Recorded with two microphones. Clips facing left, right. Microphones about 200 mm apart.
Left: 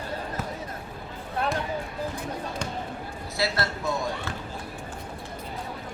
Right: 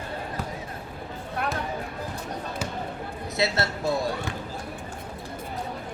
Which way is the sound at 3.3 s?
25° right (ahead or behind).